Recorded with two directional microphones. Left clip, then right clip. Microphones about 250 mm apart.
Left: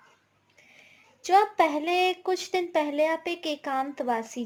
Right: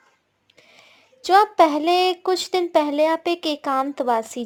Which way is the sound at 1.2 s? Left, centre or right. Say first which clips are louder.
Right 6 dB; right.